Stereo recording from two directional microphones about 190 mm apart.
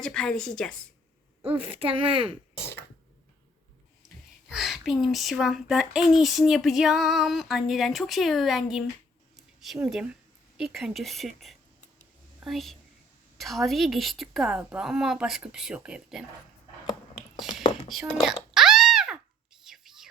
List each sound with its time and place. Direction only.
0.0 s speech: 5° left (ahead or behind)
1.5 s speech: 30° right (ahead or behind)
4.4 s speech: centre (ahead or behind)
9.3 s a sound: centre (ahead or behind)
10.6 s speech: 5° right (ahead or behind)
17.3 s whispering: centre (ahead or behind)
18.0 s a sound: 5° right (ahead or behind)
19.6 s whispering: centre (ahead or behind)